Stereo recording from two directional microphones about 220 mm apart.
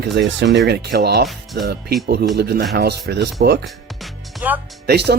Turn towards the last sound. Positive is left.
turn(degrees=-45)  # may be behind; listen again after turning